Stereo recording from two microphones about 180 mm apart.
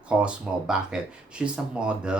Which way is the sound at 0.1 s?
5° right (ahead or behind).